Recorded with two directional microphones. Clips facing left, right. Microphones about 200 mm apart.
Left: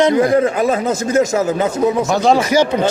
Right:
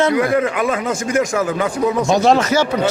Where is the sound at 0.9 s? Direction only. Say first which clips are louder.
Left 3 dB; 25° left (ahead or behind).